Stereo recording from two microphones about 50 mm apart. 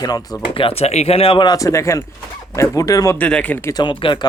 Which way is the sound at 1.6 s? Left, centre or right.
Left.